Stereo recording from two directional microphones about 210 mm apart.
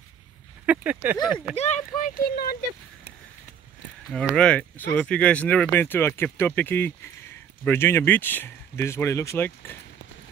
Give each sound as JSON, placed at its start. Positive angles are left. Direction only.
{"t": 0.7, "sound": "a sound", "side_deg": -5}
{"t": 1.2, "sound": "speech", "side_deg": -5}
{"t": 1.6, "sound": "speech", "side_deg": 35}
{"t": 4.1, "sound": "speech", "side_deg": 5}